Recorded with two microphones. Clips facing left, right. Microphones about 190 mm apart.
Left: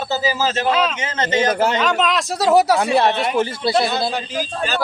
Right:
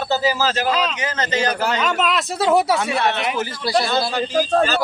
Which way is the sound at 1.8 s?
Centre (ahead or behind).